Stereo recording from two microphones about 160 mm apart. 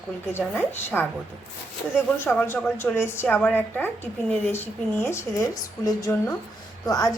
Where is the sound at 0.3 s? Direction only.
15° left (ahead or behind).